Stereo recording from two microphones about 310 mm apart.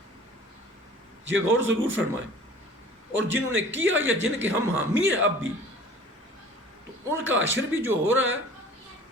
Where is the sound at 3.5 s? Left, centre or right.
Right.